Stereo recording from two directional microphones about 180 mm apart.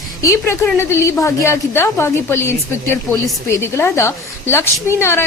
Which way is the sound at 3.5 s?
15° left (ahead or behind).